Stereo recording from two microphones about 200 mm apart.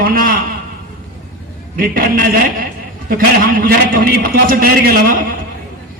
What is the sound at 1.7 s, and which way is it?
A man's voice, 45° right (ahead or behind).